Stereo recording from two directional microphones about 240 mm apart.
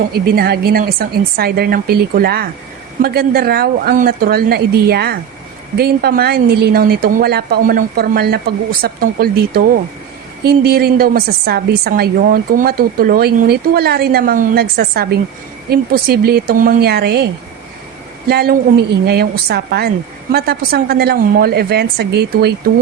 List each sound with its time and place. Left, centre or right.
0.1 s a woman's voice: right
18.3 s a woman's voice: right